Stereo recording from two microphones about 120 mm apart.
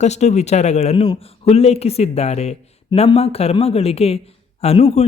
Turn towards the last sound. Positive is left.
turn(degrees=65)  # may be behind; listen again after turning